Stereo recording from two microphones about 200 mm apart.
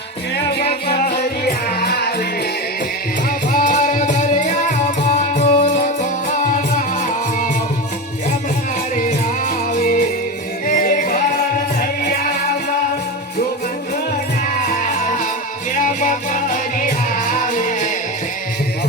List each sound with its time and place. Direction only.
0.3 s music: 50° left (ahead or behind)
3.5 s music: 40° left (ahead or behind)
9.7 s music: 40° left (ahead or behind)
14.7 s music: 40° left (ahead or behind)